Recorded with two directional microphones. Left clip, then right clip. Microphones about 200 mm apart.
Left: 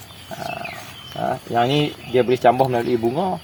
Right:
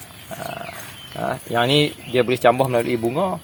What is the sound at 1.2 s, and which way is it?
Speech, 30° right (ahead or behind).